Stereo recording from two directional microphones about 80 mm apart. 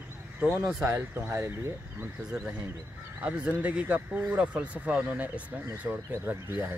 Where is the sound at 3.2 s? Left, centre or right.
Centre.